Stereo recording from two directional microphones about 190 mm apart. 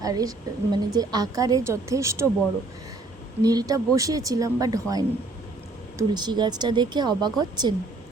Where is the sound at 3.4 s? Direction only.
20° right (ahead or behind).